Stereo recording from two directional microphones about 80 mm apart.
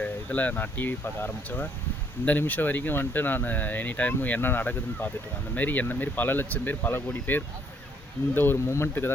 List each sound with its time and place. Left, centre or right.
0.0 s speech: centre